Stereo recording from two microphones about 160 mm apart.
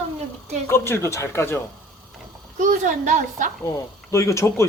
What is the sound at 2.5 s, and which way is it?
Speech, 55° right (ahead or behind).